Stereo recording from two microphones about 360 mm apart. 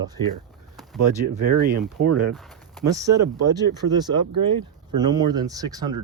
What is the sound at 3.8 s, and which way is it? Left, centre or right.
Speech, right.